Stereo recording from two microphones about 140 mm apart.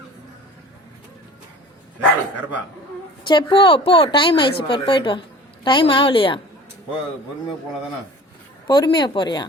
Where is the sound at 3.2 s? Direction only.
35° left (ahead or behind).